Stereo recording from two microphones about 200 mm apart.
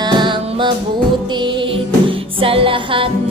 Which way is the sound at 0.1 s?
25° right (ahead or behind).